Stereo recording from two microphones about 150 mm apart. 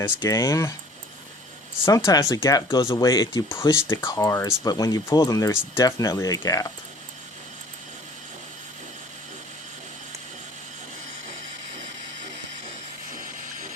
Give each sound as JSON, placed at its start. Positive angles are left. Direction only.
{"t": 0.0, "sound": "speech", "side_deg": 20}
{"t": 1.8, "sound": "speech", "side_deg": 20}